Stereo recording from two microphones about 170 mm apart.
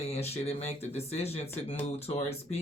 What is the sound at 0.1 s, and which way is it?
Speech, 35° left (ahead or behind).